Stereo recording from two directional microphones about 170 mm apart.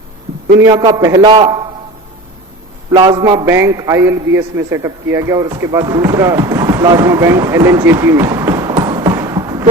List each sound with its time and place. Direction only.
0.6 s a man's voice: 20° right (ahead or behind)
2.9 s a man's voice: 25° right (ahead or behind)